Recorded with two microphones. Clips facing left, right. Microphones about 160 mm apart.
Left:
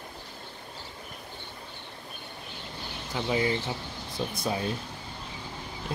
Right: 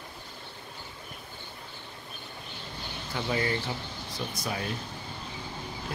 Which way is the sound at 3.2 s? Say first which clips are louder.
Left 2 dB; 15° left (ahead or behind).